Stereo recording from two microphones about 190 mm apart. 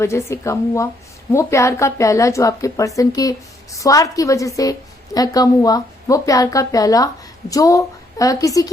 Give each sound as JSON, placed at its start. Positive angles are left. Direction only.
{"t": 0.0, "sound": "a woman's voice", "side_deg": 15}